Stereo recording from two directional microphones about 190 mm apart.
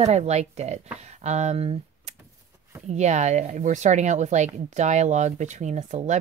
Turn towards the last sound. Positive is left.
turn(degrees=-35)  # may be behind; listen again after turning